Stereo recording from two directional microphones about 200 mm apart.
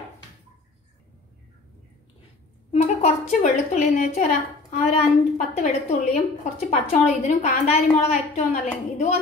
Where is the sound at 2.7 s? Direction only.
35° left (ahead or behind).